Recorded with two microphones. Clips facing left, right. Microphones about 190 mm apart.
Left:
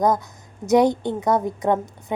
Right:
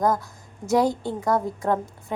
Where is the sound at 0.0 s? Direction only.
20° left (ahead or behind).